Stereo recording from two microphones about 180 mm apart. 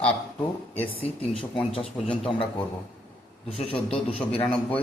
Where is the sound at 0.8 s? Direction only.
30° left (ahead or behind).